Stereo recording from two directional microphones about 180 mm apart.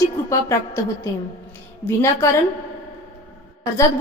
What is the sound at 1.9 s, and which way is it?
Speech, 15° left (ahead or behind).